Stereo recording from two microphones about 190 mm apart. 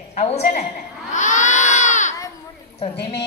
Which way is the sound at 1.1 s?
40° left (ahead or behind).